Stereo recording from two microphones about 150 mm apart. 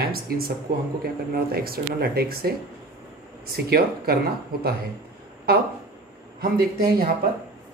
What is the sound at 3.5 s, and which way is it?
Speech, 90° right.